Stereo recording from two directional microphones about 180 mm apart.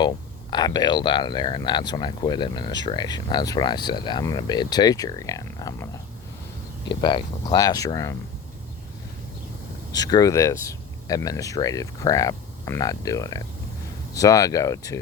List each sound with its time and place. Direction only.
0.5 s speech: 25° left (ahead or behind)
9.9 s speech: 20° left (ahead or behind)